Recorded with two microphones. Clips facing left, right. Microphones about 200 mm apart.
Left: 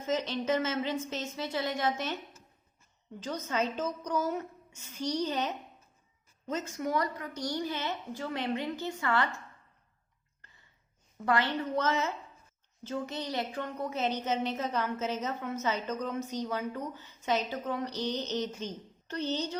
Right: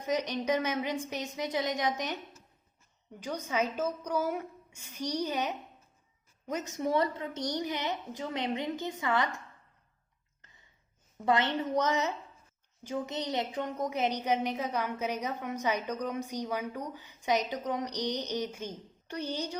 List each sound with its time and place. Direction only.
0.0 s a woman's voice: 15° right (ahead or behind)
3.2 s a woman's voice: 15° right (ahead or behind)
11.3 s a woman's voice: 20° right (ahead or behind)